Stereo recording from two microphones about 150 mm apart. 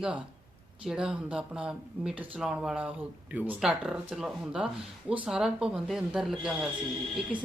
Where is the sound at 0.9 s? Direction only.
5° right (ahead or behind).